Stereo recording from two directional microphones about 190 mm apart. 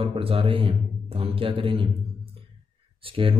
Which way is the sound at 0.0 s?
30° right (ahead or behind).